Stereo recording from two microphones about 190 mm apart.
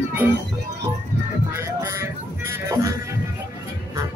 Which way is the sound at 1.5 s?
15° right (ahead or behind).